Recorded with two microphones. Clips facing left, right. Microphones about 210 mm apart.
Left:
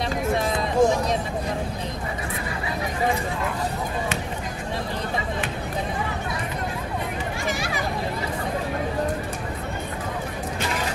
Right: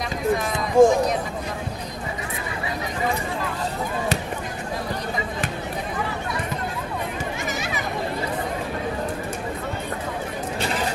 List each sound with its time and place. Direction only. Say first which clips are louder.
0.8 s speech: right 5 dB; 50° right (ahead or behind)